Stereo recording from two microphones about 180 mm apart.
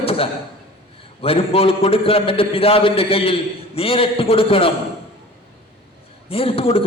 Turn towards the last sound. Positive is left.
turn(degrees=30)  # may be behind; listen again after turning